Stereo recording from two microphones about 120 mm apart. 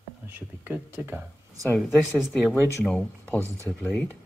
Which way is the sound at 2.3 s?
5° left (ahead or behind).